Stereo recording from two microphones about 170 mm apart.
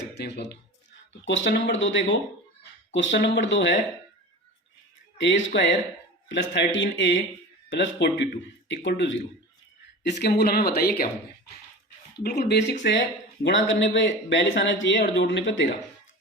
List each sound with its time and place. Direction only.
0.2 s speech: 70° left (ahead or behind)
1.2 s speech: 90° left
5.1 s speech: 90° left; by 11.1 s 60° left (ahead or behind)
12.1 s speech: 80° left